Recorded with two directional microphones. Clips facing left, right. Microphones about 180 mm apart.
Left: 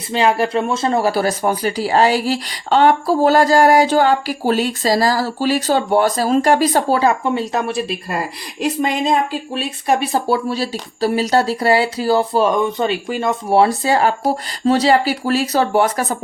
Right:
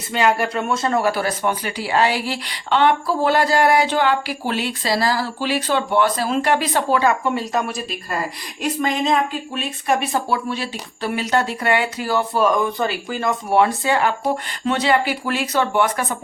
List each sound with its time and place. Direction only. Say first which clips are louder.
0.1 s speech: left 3 dB; 30° left (ahead or behind)
8.8 s speech: left 1 dB; 30° left (ahead or behind)